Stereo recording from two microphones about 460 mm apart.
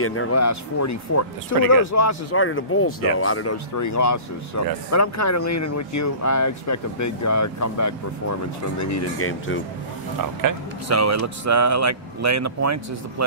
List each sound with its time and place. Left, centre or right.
0.0 s speech: left
3.7 s speech: left
10.4 s speech: right